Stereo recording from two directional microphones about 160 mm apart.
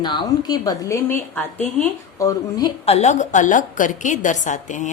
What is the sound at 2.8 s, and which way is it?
A woman's voice, 45° left (ahead or behind).